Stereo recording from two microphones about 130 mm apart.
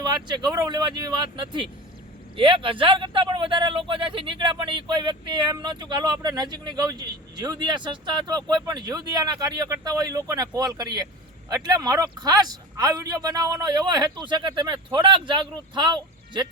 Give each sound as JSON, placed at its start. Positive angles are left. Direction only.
{"t": 0.3, "sound": "speech", "side_deg": -35}